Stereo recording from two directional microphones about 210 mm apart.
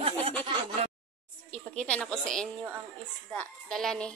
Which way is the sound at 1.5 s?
5° left (ahead or behind).